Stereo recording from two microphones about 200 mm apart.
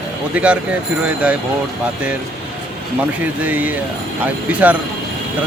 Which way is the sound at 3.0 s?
10° right (ahead or behind).